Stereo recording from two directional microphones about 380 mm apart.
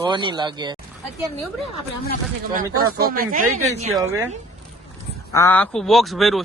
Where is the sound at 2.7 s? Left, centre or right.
Right.